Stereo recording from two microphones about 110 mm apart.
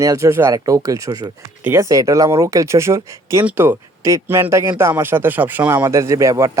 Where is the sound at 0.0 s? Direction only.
30° right (ahead or behind).